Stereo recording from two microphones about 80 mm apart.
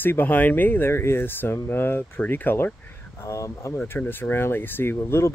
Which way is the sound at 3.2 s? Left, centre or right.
Left.